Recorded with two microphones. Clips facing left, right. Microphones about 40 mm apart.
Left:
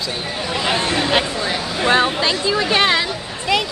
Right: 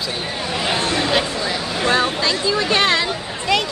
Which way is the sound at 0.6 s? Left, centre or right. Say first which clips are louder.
Left 1 dB; centre.